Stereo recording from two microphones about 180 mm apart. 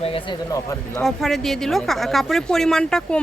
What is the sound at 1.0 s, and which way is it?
Speech, centre (ahead or behind).